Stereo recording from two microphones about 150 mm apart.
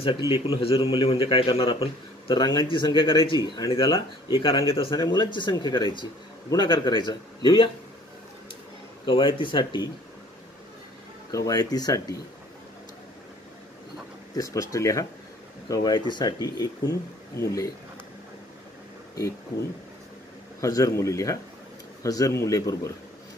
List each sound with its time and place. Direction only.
0.3 s a man's voice: 40° left (ahead or behind)
9.0 s a man's voice: 35° left (ahead or behind)
11.3 s speech: 25° left (ahead or behind)
14.3 s speech: 20° left (ahead or behind)
20.6 s speech: 20° left (ahead or behind)